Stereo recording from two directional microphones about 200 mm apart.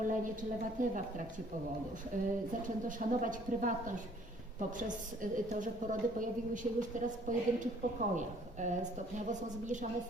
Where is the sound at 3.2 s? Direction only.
40° right (ahead or behind).